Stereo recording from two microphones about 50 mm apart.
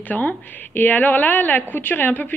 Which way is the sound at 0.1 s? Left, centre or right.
Left.